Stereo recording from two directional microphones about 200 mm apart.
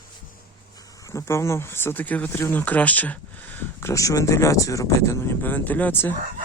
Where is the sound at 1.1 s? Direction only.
15° left (ahead or behind).